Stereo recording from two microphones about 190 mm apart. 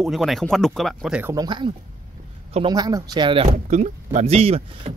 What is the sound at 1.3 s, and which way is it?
Speech, 25° right (ahead or behind).